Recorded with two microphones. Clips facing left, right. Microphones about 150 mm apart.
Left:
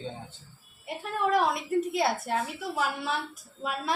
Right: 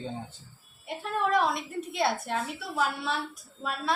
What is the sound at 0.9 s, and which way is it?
A woman's voice, centre (ahead or behind).